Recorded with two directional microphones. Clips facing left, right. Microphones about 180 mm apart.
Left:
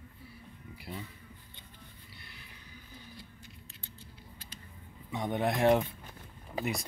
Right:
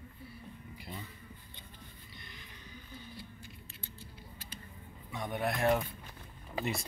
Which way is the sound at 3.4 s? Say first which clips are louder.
Right 2 dB; 10° right (ahead or behind).